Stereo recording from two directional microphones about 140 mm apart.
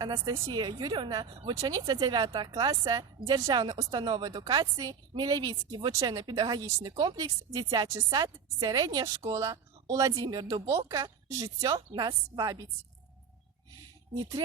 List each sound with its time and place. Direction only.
0.0 s a woman's voice: 25° right (ahead or behind)
14.1 s a woman's voice: 25° right (ahead or behind)